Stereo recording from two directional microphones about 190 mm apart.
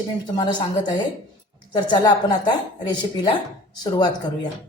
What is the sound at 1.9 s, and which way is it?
Speech, 20° left (ahead or behind).